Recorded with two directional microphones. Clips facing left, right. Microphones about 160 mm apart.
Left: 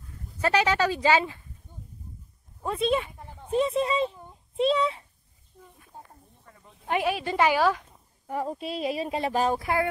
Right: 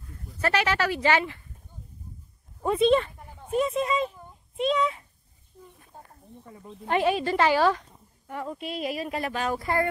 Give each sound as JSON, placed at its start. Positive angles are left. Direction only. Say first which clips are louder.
{"t": 0.4, "sound": "speech", "louder": "left 2 dB", "side_deg": 15}
{"t": 2.6, "sound": "speech", "louder": "right 5 dB", "side_deg": 0}
{"t": 3.4, "sound": "a child's voice", "louder": "left 1 dB", "side_deg": 30}
{"t": 6.9, "sound": "speech", "louder": "right 3 dB", "side_deg": 5}
{"t": 8.3, "sound": "speech", "louder": "left 3 dB", "side_deg": 35}